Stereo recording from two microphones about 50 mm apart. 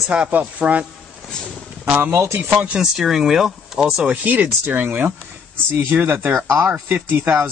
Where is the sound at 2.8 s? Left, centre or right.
Centre.